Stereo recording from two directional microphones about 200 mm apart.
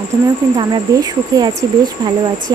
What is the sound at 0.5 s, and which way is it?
Speech, 20° right (ahead or behind).